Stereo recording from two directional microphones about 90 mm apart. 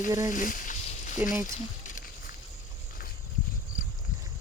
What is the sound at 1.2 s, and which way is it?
Speech, 20° right (ahead or behind).